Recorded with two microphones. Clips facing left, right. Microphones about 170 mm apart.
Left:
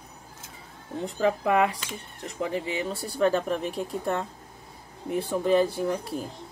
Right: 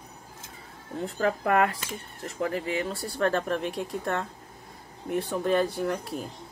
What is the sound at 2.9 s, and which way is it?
Speech, centre (ahead or behind).